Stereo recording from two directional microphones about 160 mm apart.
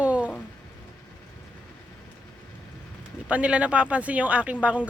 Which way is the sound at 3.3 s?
10° right (ahead or behind).